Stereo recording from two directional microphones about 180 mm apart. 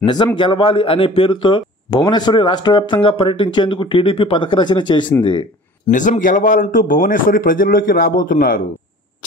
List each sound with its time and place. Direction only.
0.0 s a man's voice: 25° left (ahead or behind)
5.9 s a man's voice: 45° left (ahead or behind)